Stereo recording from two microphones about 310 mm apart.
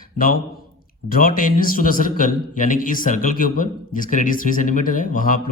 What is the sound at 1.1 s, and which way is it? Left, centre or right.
A man's voice, left.